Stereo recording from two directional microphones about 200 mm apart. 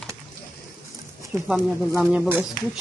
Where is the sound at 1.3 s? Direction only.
5° right (ahead or behind).